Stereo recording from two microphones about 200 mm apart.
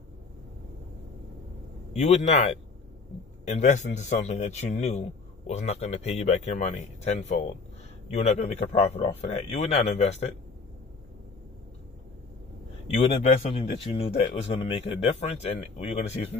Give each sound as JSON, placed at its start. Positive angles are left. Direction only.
{"t": 2.0, "sound": "speech", "side_deg": 35}
{"t": 12.9, "sound": "speech", "side_deg": 30}